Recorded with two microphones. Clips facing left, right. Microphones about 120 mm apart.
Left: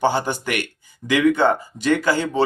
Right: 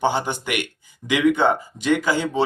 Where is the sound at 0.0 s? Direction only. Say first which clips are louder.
Left 2 dB; 15° right (ahead or behind).